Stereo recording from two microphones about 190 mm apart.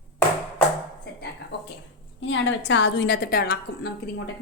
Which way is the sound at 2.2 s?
80° left.